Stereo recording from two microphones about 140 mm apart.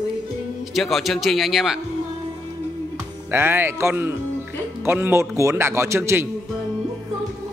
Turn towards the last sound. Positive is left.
turn(degrees=-20)  # may be behind; listen again after turning